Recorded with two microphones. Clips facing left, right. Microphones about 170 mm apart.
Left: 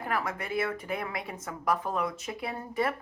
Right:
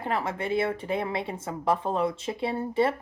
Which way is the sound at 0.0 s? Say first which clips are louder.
Right 3 dB; 25° right (ahead or behind).